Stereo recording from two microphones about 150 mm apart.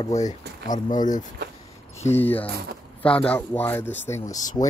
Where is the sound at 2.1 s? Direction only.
15° left (ahead or behind).